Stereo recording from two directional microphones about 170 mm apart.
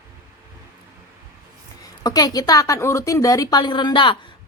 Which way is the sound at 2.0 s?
20° left (ahead or behind).